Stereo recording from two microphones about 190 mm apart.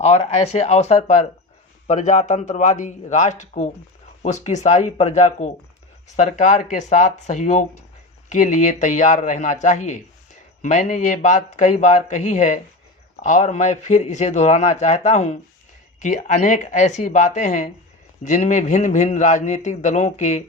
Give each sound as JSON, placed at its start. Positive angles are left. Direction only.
{"t": 0.0, "sound": "a man's voice", "side_deg": 35}